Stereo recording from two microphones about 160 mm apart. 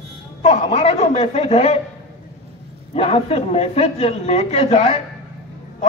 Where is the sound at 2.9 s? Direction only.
40° left (ahead or behind).